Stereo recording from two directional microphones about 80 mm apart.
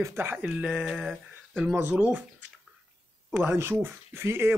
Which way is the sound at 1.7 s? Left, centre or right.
Right.